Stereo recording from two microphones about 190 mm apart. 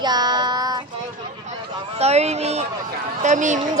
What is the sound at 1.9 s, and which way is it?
Speech, 35° right (ahead or behind).